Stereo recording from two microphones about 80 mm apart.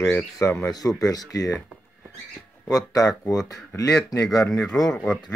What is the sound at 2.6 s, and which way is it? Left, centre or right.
Speech, left.